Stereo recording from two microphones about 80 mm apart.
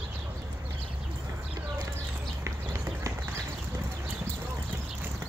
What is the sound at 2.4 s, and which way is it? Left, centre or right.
Horse, right.